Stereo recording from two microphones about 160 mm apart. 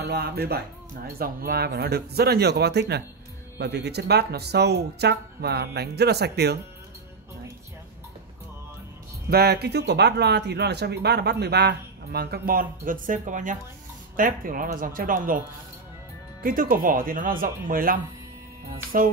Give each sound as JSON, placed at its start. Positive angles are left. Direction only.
{"t": 0.0, "sound": "a man's voice", "side_deg": -85}
{"t": 1.0, "sound": "a man's voice", "side_deg": -70}
{"t": 9.3, "sound": "speech", "side_deg": -85}
{"t": 16.4, "sound": "speech", "side_deg": -60}